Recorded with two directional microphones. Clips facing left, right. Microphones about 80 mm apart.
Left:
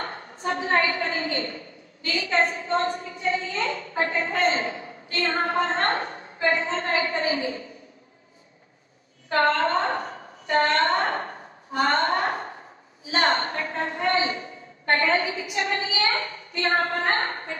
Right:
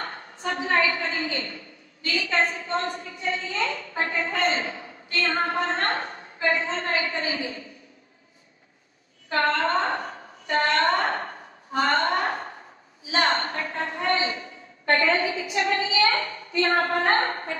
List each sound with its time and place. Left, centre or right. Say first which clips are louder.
0.0 s a sound: left 2 dB; left
2.0 s a woman's voice: left 1 dB; left
9.3 s a woman's voice: left 2 dB; left
16.6 s a woman's voice: right 1 dB; right